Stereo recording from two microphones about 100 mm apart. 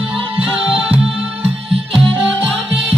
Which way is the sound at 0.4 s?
15° right (ahead or behind).